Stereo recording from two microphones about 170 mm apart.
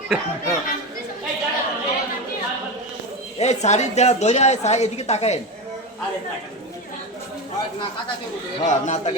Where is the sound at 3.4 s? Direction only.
40° left (ahead or behind).